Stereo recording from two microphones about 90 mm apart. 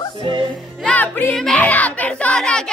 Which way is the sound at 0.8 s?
20° left (ahead or behind).